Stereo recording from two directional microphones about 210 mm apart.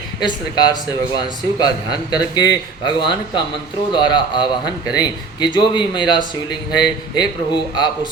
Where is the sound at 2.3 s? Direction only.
20° left (ahead or behind).